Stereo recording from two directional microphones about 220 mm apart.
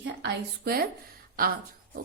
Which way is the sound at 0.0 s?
50° right (ahead or behind).